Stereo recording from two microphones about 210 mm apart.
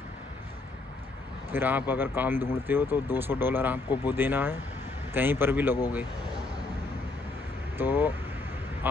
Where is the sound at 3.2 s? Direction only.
10° right (ahead or behind).